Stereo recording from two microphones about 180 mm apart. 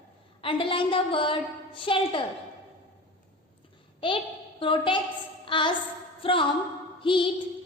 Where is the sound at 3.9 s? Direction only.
30° left (ahead or behind).